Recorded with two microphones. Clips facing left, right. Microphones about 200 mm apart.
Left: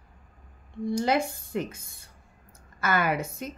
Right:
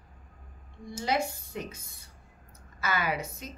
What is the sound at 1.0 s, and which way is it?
Speech, 55° left (ahead or behind).